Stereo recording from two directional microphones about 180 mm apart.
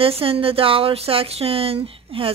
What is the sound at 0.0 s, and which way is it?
Speech, 30° right (ahead or behind).